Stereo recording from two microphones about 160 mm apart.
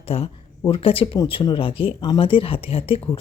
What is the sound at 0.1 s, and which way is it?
Speech, 35° left (ahead or behind).